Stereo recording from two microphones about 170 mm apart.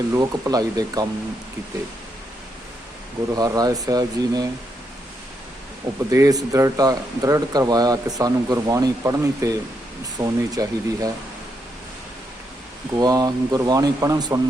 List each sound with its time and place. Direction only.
0.1 s speech: 20° right (ahead or behind)
3.3 s speech: 20° right (ahead or behind)
6.1 s speech: 20° right (ahead or behind)
12.9 s speech: 20° right (ahead or behind)